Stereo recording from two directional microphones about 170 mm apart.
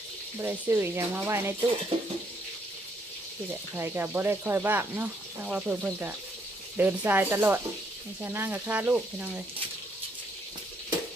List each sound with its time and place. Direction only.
0.3 s speech: 15° right (ahead or behind)
1.9 s a sound: 35° right (ahead or behind)
3.8 s speech: 15° right (ahead or behind)